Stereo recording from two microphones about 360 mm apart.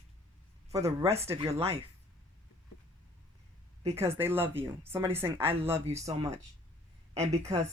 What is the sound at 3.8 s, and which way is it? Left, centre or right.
A woman's voice, centre.